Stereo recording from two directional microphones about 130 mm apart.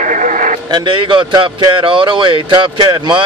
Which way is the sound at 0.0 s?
75° right (ahead or behind).